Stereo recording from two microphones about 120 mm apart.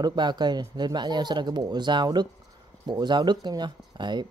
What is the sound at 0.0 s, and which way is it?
Speech, 40° right (ahead or behind).